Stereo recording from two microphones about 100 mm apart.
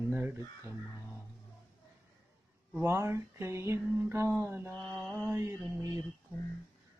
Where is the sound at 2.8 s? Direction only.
25° right (ahead or behind).